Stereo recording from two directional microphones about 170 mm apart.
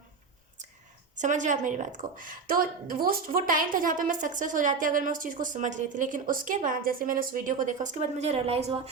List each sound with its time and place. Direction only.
1.2 s a woman's voice: 45° right (ahead or behind)